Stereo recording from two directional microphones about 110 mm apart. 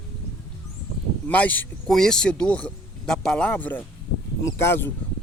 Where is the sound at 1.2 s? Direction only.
15° left (ahead or behind).